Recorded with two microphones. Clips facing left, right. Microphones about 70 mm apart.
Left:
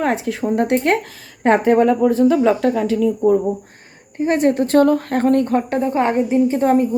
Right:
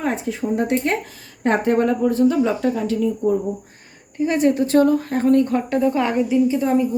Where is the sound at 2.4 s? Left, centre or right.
Left.